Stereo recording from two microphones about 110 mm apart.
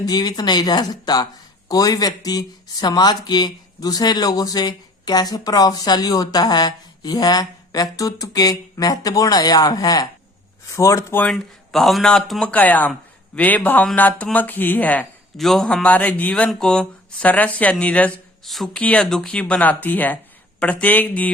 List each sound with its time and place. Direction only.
0.0 s speech: 35° left (ahead or behind)
11.1 s speech: 15° left (ahead or behind)
11.7 s a man's voice: centre (ahead or behind)
15.4 s speech: centre (ahead or behind)
18.4 s a man's voice: centre (ahead or behind)